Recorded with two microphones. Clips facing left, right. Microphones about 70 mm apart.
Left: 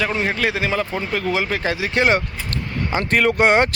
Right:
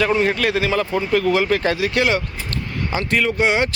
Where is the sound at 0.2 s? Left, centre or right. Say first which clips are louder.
Right 2 dB; centre.